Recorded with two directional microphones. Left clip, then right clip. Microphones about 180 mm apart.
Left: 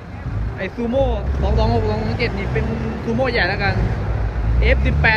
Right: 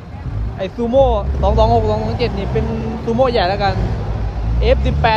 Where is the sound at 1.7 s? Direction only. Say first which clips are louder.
Right 5 dB; 10° right (ahead or behind).